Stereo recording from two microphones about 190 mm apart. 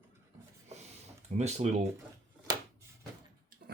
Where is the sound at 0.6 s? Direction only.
35° right (ahead or behind).